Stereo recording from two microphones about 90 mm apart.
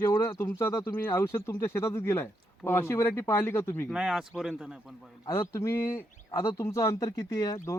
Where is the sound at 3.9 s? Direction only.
5° right (ahead or behind).